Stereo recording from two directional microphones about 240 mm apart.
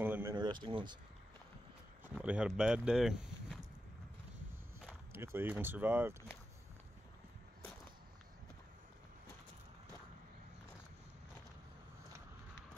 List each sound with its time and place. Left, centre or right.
0.0 s speech: centre
2.0 s speech: centre
4.8 s speech: centre